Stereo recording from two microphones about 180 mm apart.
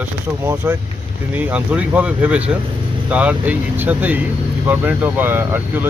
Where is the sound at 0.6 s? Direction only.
15° right (ahead or behind).